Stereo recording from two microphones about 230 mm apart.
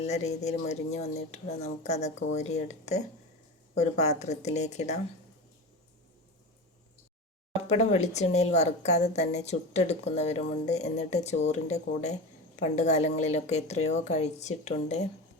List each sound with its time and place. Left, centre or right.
0.0 s a woman's voice: left
7.7 s a woman's voice: left